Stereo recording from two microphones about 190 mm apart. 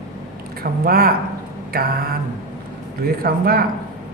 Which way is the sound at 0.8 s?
55° right (ahead or behind).